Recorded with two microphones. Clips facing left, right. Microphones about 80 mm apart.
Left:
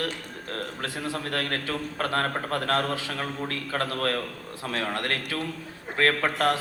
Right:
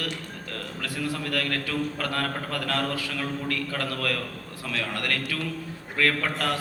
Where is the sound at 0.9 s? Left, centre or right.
Left.